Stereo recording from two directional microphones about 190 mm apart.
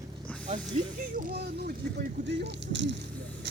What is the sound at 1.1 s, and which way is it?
Speech, 50° right (ahead or behind).